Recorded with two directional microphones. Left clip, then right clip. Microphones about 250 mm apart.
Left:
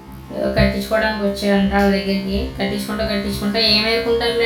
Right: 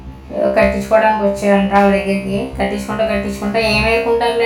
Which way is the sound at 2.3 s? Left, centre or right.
Right.